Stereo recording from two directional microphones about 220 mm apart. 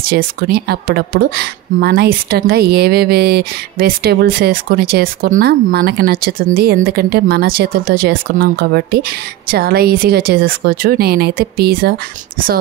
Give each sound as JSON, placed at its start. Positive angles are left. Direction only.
{"t": 0.0, "sound": "a woman's voice", "side_deg": -40}